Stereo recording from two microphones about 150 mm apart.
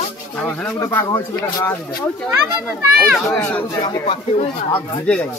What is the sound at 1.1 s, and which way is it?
Speech, 30° left (ahead or behind).